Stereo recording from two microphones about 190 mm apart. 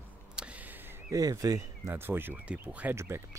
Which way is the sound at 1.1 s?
20° right (ahead or behind).